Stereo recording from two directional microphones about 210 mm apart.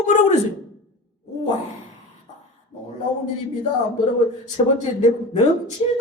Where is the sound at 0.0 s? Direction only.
35° left (ahead or behind).